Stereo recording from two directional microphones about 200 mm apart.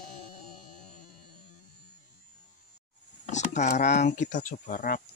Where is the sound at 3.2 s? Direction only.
35° left (ahead or behind).